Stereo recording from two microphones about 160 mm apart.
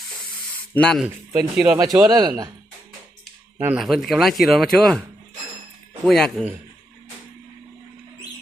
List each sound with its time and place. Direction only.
0.7 s speech: 5° left (ahead or behind)
1.0 s a man's voice: 20° right (ahead or behind)
1.5 s speech: 5° right (ahead or behind)
2.0 s speech: 25° right (ahead or behind)
3.6 s speech: 10° right (ahead or behind)
6.1 s speech: centre (ahead or behind)